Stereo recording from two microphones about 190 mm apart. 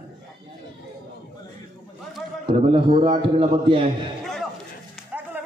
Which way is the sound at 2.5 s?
30° right (ahead or behind).